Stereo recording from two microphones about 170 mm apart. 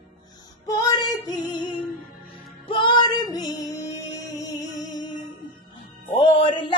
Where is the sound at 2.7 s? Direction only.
30° left (ahead or behind).